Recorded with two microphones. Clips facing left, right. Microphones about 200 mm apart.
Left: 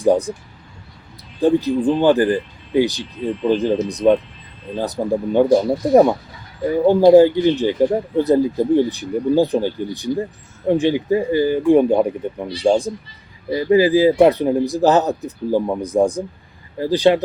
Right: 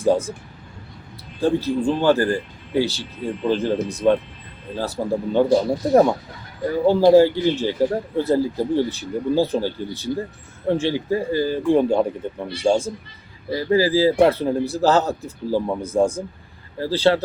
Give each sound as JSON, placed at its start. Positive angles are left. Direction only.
{"t": 0.0, "sound": "speech", "side_deg": 15}
{"t": 1.4, "sound": "speech", "side_deg": 15}